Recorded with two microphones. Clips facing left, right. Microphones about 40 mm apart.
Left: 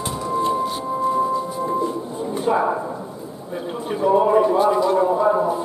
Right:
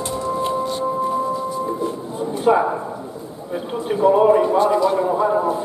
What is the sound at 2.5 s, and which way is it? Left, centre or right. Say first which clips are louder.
Speech: right 4 dB; right.